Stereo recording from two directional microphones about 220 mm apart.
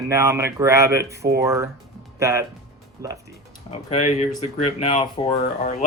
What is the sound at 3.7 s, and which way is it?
Speech, 25° left (ahead or behind).